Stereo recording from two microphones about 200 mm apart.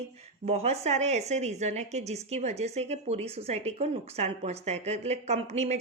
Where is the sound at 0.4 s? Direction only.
30° right (ahead or behind).